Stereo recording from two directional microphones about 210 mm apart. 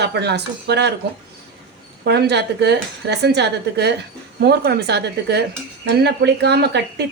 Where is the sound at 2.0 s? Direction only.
50° right (ahead or behind).